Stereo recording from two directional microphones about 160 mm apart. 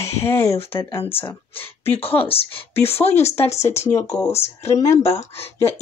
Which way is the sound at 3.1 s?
15° left (ahead or behind).